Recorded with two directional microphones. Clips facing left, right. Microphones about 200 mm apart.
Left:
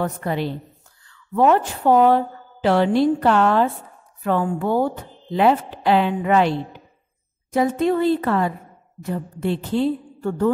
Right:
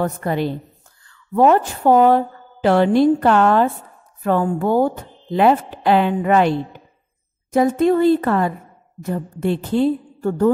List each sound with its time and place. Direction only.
0.0 s a woman's voice: 45° right (ahead or behind)
7.5 s speech: 45° right (ahead or behind)